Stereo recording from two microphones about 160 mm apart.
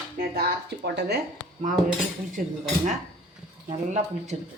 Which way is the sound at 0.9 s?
90° right.